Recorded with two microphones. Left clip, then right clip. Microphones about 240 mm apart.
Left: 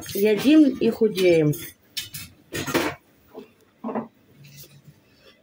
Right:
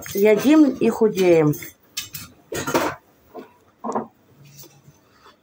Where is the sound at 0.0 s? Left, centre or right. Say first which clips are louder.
Right 4 dB; centre.